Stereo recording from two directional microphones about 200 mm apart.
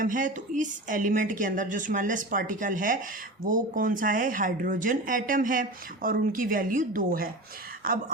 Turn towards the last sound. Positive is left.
turn(degrees=-45)  # may be behind; listen again after turning